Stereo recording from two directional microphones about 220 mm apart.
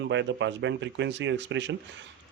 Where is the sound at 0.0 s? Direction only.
55° right (ahead or behind).